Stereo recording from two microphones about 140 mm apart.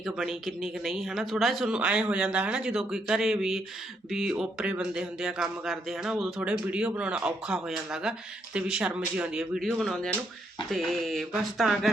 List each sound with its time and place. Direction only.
0.0 s speech: centre (ahead or behind)